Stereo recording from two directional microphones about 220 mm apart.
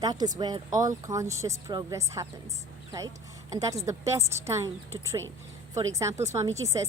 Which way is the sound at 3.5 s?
15° right (ahead or behind).